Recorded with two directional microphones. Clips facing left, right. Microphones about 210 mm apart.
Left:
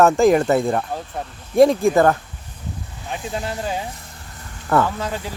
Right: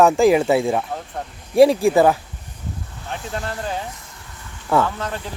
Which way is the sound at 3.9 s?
35° left (ahead or behind).